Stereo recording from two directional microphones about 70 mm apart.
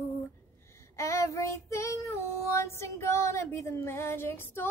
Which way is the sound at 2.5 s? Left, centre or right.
Left.